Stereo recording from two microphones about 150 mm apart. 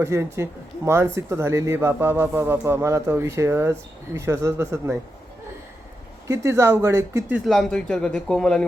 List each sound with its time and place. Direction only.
0.0 s speech: 20° right (ahead or behind)
6.2 s speech: 20° right (ahead or behind)
7.4 s a man's voice: 5° left (ahead or behind)